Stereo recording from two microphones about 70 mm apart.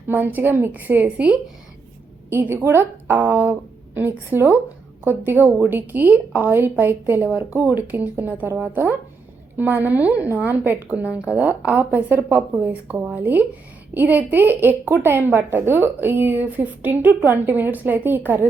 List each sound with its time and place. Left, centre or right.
0.1 s a woman's voice: right
2.3 s a woman's voice: right
7.3 s a woman's voice: centre